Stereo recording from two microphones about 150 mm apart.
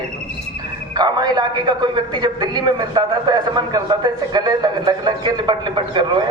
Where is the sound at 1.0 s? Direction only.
30° right (ahead or behind).